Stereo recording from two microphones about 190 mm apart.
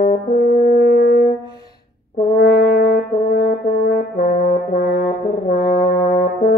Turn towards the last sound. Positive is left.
turn(degrees=60)  # may be behind; listen again after turning